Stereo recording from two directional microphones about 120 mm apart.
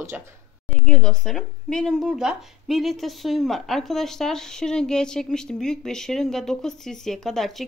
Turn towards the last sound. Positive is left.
turn(degrees=0)  # may be behind; listen again after turning